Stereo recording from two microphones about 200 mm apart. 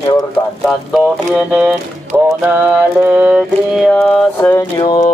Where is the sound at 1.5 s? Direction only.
5° right (ahead or behind).